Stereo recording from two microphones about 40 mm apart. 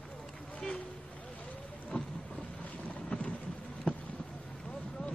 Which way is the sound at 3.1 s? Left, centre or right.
Left.